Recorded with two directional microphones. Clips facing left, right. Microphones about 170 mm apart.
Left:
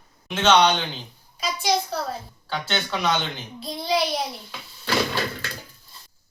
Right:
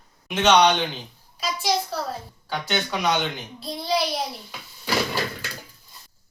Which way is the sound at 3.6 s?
Centre (ahead or behind).